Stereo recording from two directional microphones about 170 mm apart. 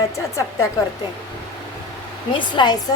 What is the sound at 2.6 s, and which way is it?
Speech, 25° left (ahead or behind).